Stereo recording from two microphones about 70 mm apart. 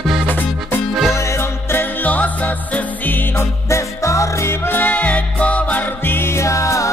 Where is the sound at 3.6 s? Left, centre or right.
Left.